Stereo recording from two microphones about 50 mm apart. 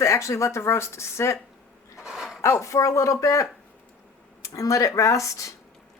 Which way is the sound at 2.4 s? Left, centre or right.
Left.